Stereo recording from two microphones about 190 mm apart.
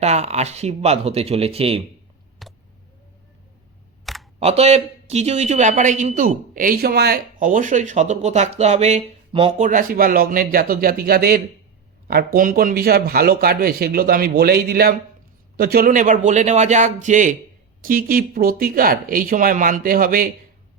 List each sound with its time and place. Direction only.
0.0 s a man's voice: 35° right (ahead or behind)
2.4 s a sound: centre (ahead or behind)
4.0 s camera: centre (ahead or behind)
4.4 s a man's voice: 35° right (ahead or behind)
9.6 s a man's voice: 45° right (ahead or behind)